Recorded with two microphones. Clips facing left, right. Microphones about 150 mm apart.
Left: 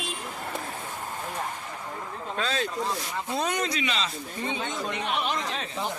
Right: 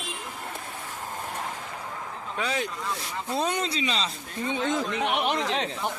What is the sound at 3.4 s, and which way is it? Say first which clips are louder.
Speech: right 1 dB; 30° right (ahead or behind).